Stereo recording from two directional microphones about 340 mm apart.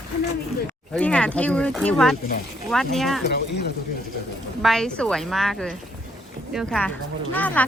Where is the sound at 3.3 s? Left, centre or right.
Left.